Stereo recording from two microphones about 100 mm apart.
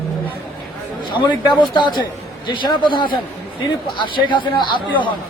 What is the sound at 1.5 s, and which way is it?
Speech, 50° left (ahead or behind).